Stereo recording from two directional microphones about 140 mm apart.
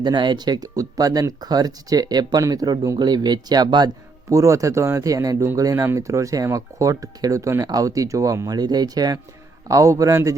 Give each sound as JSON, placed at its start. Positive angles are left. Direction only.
{"t": 0.0, "sound": "speech", "side_deg": -35}